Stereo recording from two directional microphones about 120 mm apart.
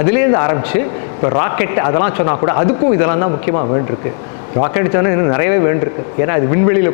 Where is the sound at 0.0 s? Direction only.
20° left (ahead or behind).